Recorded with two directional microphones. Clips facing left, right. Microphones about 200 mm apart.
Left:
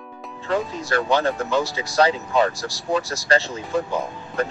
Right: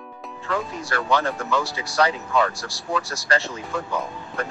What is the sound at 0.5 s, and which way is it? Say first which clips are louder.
Speech: left 4 dB; 25° left (ahead or behind).